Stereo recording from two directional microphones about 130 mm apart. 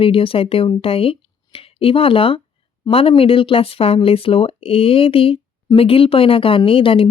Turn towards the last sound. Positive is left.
turn(degrees=45)  # may be behind; listen again after turning